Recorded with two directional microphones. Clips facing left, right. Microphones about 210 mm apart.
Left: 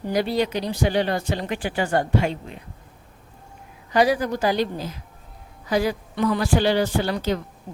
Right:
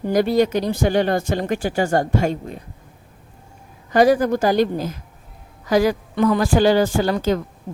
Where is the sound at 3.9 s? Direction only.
45° right (ahead or behind).